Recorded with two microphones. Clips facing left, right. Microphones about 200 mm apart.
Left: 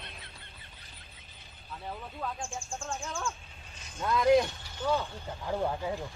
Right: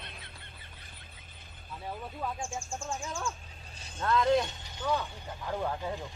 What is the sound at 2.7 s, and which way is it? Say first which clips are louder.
Speech: left 1 dB; 5° right (ahead or behind).